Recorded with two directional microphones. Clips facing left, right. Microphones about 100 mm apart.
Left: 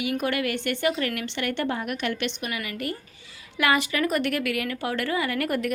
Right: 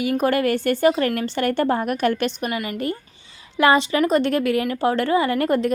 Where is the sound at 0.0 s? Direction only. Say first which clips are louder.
Right 7 dB; 40° right (ahead or behind).